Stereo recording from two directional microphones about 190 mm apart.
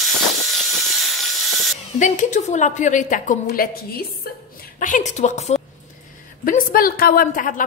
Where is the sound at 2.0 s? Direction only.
40° left (ahead or behind).